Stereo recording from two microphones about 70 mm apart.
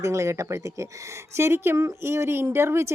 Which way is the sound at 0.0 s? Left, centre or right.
Right.